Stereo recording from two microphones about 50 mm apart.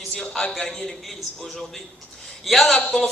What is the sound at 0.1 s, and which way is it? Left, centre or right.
A man's voice, centre.